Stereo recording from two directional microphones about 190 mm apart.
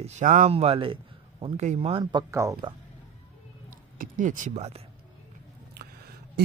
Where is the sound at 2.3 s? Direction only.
15° right (ahead or behind).